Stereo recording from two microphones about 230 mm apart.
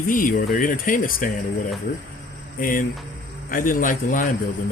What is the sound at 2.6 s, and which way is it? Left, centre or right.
Speech, left.